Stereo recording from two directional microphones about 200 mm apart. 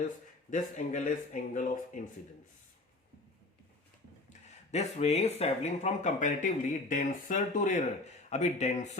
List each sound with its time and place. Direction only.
0.5 s speech: 40° left (ahead or behind)
4.3 s speech: 35° left (ahead or behind)